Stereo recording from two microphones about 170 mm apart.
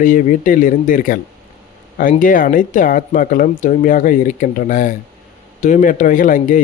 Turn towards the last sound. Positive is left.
turn(degrees=50)  # may be behind; listen again after turning